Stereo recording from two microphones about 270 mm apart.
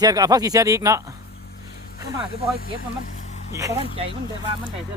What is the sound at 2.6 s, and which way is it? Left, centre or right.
Speech, left.